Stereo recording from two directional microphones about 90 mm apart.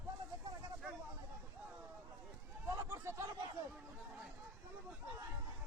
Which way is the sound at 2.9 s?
30° right (ahead or behind).